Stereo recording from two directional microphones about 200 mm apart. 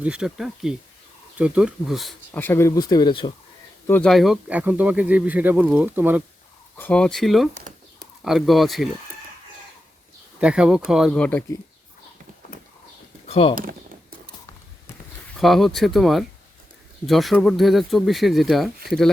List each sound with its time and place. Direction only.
0.0 s speech: 5° right (ahead or behind)
2.4 s speech: 10° left (ahead or behind)
3.8 s speech: 5° left (ahead or behind); by 6.2 s 10° right (ahead or behind)
6.7 s speech: 5° left (ahead or behind)
10.4 s speech: 5° right (ahead or behind)
13.2 s speech: 30° left (ahead or behind)
15.4 s speech: centre (ahead or behind)